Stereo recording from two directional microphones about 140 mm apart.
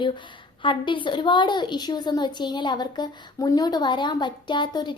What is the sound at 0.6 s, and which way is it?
A woman's voice, 35° left (ahead or behind).